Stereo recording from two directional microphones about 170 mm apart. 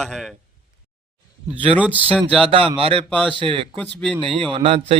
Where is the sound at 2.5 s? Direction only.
30° right (ahead or behind).